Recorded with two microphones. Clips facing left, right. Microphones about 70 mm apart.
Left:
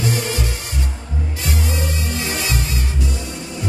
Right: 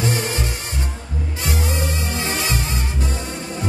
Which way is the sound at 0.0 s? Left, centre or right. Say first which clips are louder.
Even; right.